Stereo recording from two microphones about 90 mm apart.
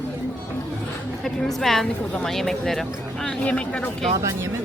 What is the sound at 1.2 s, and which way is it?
Speech, 5° left (ahead or behind).